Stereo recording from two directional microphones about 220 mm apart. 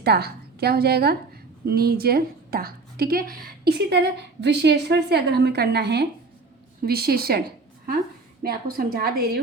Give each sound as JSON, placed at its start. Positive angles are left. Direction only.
{"t": 0.0, "sound": "a woman's voice", "side_deg": -45}
{"t": 8.4, "sound": "a woman's voice", "side_deg": -45}